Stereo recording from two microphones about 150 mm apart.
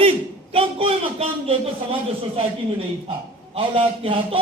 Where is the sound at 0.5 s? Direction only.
40° right (ahead or behind).